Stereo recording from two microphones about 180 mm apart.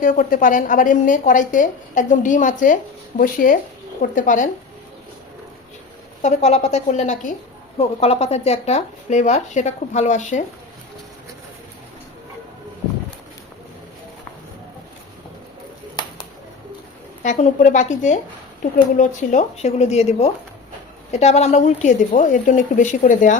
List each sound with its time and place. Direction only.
0.0 s a woman's voice: 50° left (ahead or behind)
6.2 s speech: 40° left (ahead or behind)
17.2 s a woman's voice: 40° left (ahead or behind)